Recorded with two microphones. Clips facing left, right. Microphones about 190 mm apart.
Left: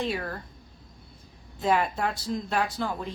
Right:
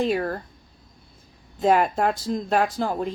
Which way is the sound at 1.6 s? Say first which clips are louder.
Right 6 dB; 45° right (ahead or behind).